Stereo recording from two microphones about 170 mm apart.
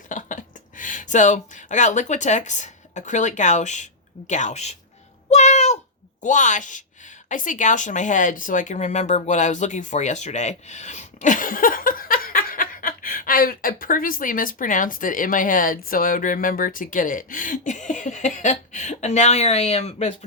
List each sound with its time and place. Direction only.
0.1 s speech: 50° left (ahead or behind)
5.3 s a sound: 40° left (ahead or behind)
6.2 s speech: 45° left (ahead or behind)